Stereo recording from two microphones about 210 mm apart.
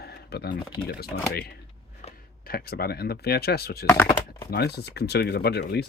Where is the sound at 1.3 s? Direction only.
50° left (ahead or behind).